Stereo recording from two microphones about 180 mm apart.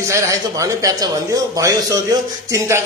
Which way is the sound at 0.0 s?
15° right (ahead or behind).